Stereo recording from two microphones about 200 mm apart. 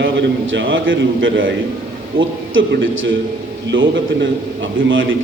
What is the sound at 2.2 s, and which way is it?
Speech, 25° right (ahead or behind).